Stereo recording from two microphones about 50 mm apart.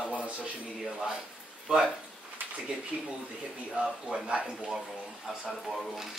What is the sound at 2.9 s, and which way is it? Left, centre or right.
Speech, right.